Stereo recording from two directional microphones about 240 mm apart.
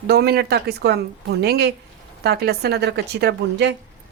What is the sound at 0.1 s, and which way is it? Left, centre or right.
A woman's voice, right.